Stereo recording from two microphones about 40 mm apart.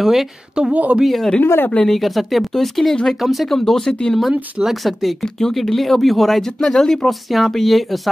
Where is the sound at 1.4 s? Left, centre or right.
Left.